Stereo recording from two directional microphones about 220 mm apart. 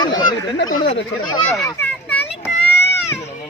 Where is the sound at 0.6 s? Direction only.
65° left (ahead or behind).